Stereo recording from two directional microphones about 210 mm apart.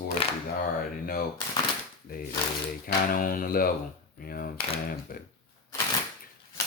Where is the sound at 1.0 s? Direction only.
45° left (ahead or behind).